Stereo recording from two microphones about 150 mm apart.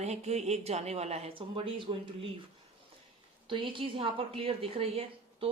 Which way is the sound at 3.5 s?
35° right (ahead or behind).